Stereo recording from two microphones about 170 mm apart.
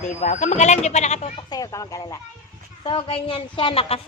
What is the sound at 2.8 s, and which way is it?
A woman's voice, 30° left (ahead or behind).